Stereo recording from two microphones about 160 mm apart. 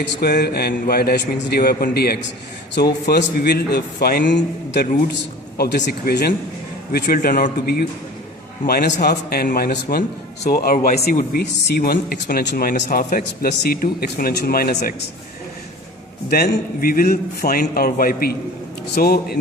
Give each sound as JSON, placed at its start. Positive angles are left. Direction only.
{"t": 0.0, "sound": "a man's voice", "side_deg": 80}
{"t": 5.8, "sound": "speech", "side_deg": 70}
{"t": 16.3, "sound": "speech", "side_deg": 70}